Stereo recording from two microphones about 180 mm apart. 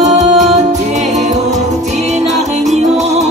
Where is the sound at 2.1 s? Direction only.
40° right (ahead or behind).